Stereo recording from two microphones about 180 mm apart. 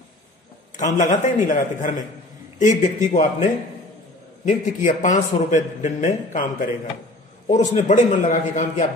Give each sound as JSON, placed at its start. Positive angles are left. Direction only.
{"t": 0.7, "sound": "a man's voice", "side_deg": 45}
{"t": 4.5, "sound": "a man's voice", "side_deg": 45}
{"t": 7.4, "sound": "a man's voice", "side_deg": 40}